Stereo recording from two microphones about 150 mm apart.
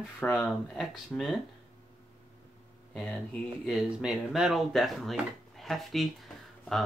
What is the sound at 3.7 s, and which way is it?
Speech, centre (ahead or behind).